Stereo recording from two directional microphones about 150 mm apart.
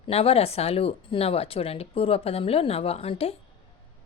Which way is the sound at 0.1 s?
40° left (ahead or behind).